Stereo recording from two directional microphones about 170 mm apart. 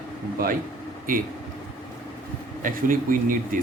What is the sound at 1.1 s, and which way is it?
Speech, 55° right (ahead or behind).